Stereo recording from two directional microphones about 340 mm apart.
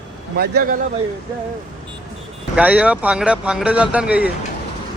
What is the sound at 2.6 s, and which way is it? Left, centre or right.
Speech, centre.